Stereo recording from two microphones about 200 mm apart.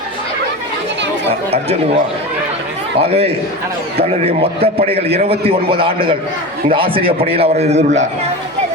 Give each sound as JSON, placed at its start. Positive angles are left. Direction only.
{"t": 3.0, "sound": "a man's voice", "side_deg": -30}